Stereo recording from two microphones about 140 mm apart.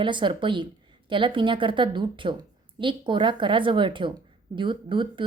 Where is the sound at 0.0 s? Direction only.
35° right (ahead or behind).